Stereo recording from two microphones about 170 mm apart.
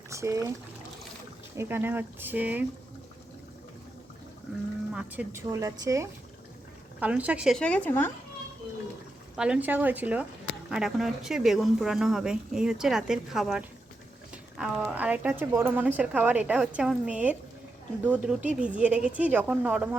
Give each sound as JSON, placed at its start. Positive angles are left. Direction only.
{"t": 0.1, "sound": "speech", "side_deg": -15}
{"t": 1.5, "sound": "speech", "side_deg": -10}
{"t": 4.9, "sound": "a woman's voice", "side_deg": -15}
{"t": 7.0, "sound": "speech", "side_deg": -10}
{"t": 9.3, "sound": "speech", "side_deg": -5}